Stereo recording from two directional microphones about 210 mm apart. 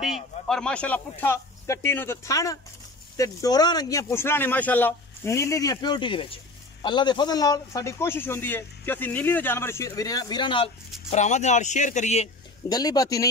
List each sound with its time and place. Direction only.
0.0 s speech: centre (ahead or behind); by 10.7 s 25° left (ahead or behind)
11.1 s speech: 35° left (ahead or behind)
12.6 s speech: 20° left (ahead or behind)